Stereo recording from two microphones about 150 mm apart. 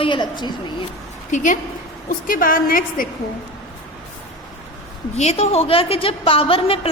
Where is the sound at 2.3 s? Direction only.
70° left (ahead or behind).